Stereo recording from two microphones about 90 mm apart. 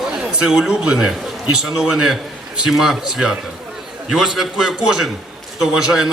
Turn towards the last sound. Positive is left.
turn(degrees=-5)  # may be behind; listen again after turning